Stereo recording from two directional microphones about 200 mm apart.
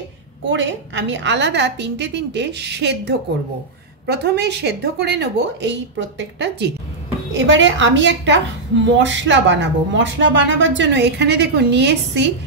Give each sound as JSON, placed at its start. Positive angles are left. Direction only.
{"t": 0.5, "sound": "a woman's voice", "side_deg": -65}